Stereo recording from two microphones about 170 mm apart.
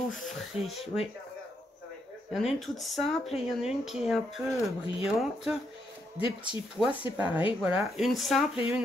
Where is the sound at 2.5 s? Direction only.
Centre (ahead or behind).